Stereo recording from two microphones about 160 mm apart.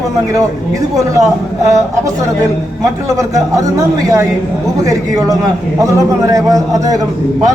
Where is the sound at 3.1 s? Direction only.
20° right (ahead or behind).